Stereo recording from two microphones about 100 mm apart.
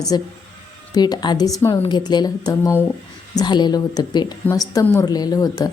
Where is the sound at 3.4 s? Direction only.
45° left (ahead or behind).